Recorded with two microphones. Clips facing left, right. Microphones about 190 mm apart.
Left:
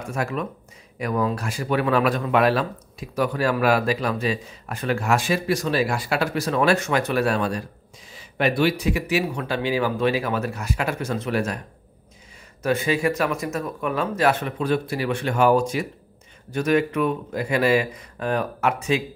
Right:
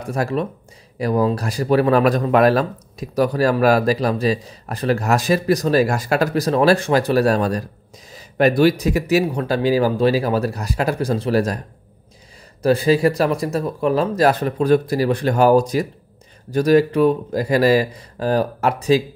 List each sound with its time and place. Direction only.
0.0 s speech: 35° right (ahead or behind)
12.6 s speech: 35° right (ahead or behind)